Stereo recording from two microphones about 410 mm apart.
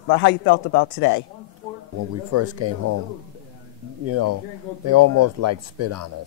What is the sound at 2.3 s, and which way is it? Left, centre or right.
Speech, right.